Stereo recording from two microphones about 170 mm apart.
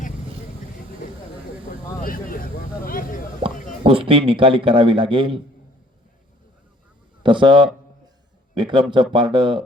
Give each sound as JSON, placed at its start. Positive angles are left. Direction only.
{"t": 2.0, "sound": "vehicle", "side_deg": 55}
{"t": 3.4, "sound": "a sound", "side_deg": -30}
{"t": 3.8, "sound": "a man's voice", "side_deg": -30}
{"t": 7.2, "sound": "a man's voice", "side_deg": -30}